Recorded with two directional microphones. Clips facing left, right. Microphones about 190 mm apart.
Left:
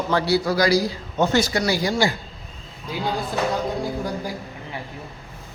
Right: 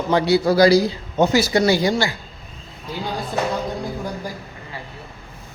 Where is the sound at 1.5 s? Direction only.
25° right (ahead or behind).